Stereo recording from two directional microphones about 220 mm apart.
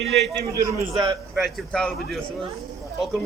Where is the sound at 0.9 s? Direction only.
20° right (ahead or behind).